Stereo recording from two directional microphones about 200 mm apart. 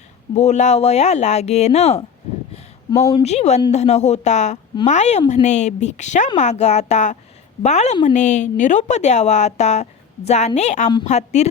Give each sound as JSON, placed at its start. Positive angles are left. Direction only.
{"t": 0.3, "sound": "a woman's voice", "side_deg": 35}
{"t": 2.9, "sound": "speech", "side_deg": 15}
{"t": 3.2, "sound": "a woman's voice", "side_deg": 35}